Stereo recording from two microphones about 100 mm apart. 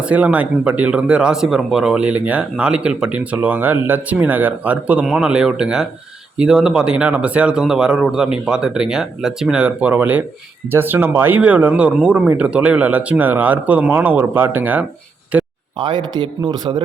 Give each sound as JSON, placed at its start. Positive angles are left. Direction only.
{"t": 0.0, "sound": "speech", "side_deg": -15}
{"t": 15.3, "sound": "a sound", "side_deg": -15}
{"t": 15.8, "sound": "speech", "side_deg": -50}